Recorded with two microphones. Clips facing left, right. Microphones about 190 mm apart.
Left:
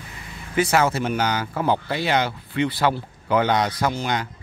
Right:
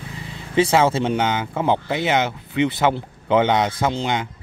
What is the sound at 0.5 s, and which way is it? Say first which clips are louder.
Speech: right 3 dB; 25° right (ahead or behind).